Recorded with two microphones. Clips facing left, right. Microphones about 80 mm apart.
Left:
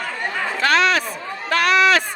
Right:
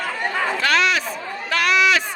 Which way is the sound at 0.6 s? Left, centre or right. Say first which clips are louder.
Left 4 dB; left.